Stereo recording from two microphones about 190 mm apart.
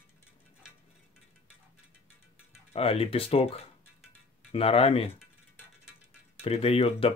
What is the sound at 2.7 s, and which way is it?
Speech, 30° left (ahead or behind).